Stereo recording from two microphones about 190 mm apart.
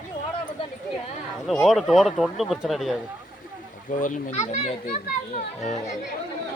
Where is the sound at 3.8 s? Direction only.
45° left (ahead or behind).